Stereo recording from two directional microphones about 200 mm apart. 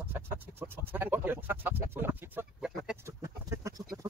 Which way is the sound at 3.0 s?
15° right (ahead or behind).